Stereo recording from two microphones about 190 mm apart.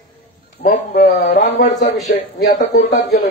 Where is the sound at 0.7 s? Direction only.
50° left (ahead or behind).